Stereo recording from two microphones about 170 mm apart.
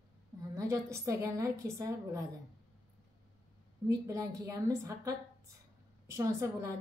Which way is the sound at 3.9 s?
20° right (ahead or behind).